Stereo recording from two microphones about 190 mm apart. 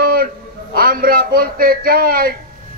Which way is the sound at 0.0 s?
50° right (ahead or behind).